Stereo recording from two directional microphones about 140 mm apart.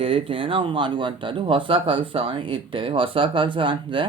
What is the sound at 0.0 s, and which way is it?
Speech, 40° right (ahead or behind).